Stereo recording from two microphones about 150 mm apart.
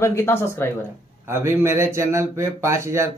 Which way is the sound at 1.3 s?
15° right (ahead or behind).